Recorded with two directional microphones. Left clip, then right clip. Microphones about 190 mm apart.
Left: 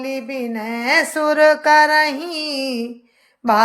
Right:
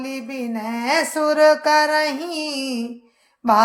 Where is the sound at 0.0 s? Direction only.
10° left (ahead or behind).